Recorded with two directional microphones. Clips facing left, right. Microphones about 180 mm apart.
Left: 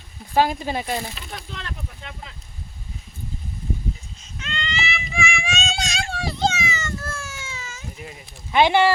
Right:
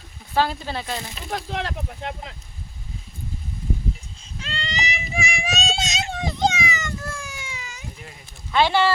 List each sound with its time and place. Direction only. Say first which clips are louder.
0.3 s speech: left 3 dB; 15° left (ahead or behind)
1.3 s speech: right 8 dB; 75° right (ahead or behind); by 2.3 s 60° right (ahead or behind)
4.4 s child singing: left 1 dB; 35° right (ahead or behind)
5.7 s a sound: even; 20° right (ahead or behind)
8.5 s speech: left 2 dB; 15° left (ahead or behind)